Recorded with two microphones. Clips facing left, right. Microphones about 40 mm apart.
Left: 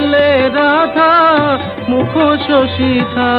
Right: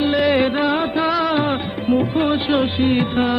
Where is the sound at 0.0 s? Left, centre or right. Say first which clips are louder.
Left 6 dB; left.